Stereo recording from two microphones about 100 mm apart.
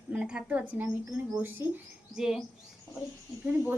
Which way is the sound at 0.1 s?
10° right (ahead or behind).